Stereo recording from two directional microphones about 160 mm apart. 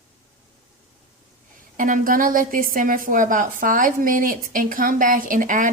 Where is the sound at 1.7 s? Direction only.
60° right (ahead or behind).